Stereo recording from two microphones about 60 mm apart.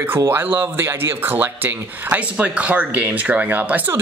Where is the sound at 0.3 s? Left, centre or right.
Right.